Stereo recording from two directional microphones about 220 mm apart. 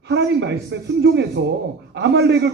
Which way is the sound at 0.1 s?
50° right (ahead or behind).